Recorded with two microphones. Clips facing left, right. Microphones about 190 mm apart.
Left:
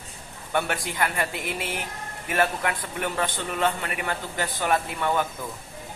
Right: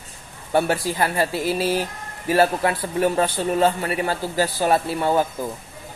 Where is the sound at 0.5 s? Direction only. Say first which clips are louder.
Right 7 dB; 30° right (ahead or behind).